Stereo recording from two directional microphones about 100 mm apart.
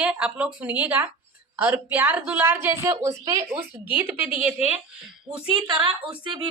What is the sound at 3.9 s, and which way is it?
Speech, 15° right (ahead or behind).